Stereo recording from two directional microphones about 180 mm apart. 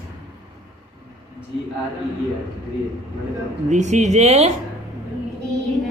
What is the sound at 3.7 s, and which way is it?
Speech, 40° right (ahead or behind).